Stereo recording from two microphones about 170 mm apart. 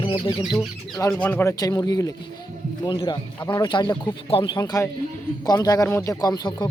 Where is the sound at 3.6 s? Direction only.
25° left (ahead or behind).